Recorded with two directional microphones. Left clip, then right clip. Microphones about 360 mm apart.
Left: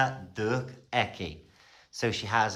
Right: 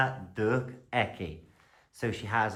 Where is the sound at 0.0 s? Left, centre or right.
Centre.